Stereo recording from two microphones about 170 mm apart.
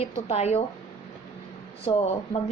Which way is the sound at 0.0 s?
40° left (ahead or behind).